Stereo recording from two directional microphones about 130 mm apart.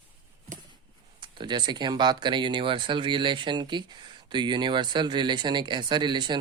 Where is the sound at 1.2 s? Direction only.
35° right (ahead or behind).